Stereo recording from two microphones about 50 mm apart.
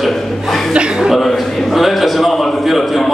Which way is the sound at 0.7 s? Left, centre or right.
Centre.